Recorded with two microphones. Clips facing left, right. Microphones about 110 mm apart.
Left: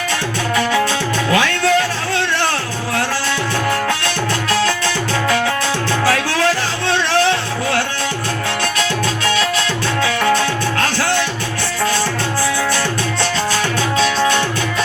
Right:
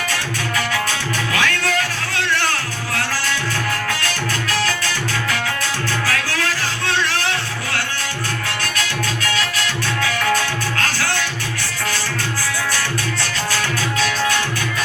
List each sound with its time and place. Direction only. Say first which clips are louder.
3.8 s music: left 4 dB; 25° left (ahead or behind)
6.1 s music: left 7 dB; 25° left (ahead or behind)
9.2 s music: left 6 dB; 25° left (ahead or behind)
13.5 s music: left 4 dB; 25° left (ahead or behind)